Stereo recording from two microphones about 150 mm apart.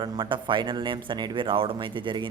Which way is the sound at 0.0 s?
30° right (ahead or behind).